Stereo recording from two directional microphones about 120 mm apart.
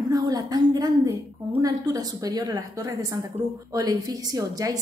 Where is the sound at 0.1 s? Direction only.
30° right (ahead or behind).